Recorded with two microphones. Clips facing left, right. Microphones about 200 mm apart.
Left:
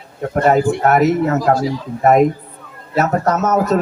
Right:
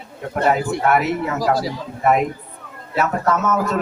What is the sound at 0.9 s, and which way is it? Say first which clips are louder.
A man's voice: left 4 dB; 40° left (ahead or behind).